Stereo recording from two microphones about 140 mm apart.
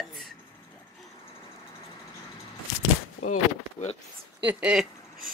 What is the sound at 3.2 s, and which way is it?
Speech, 50° left (ahead or behind).